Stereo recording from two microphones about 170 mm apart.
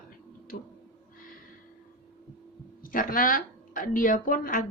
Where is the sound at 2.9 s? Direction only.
55° left (ahead or behind).